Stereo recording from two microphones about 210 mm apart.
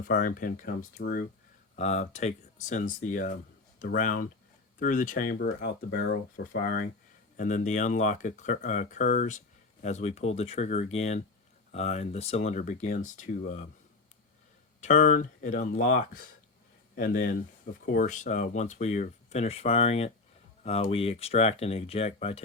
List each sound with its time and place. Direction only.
0.1 s speech: 40° left (ahead or behind)
1.7 s speech: 30° left (ahead or behind)
14.8 s speech: 35° left (ahead or behind)